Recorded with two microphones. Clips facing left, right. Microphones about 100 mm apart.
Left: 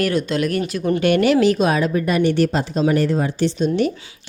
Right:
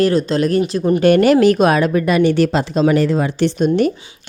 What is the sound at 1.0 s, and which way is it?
A woman's voice, 40° right (ahead or behind).